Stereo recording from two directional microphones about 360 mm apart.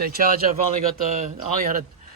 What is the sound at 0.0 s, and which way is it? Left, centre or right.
Speech, right.